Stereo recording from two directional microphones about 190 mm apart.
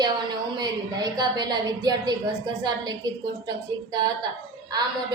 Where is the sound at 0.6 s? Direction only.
20° right (ahead or behind).